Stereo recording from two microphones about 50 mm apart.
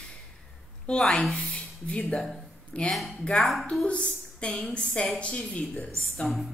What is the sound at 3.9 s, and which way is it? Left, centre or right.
A woman's voice, left.